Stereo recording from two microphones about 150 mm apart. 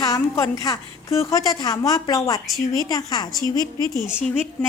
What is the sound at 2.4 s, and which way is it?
Speech, centre (ahead or behind).